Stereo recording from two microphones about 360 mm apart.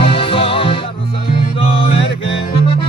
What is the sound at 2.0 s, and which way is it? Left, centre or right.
Music, left.